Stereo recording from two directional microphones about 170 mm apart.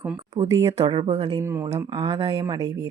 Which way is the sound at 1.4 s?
20° right (ahead or behind).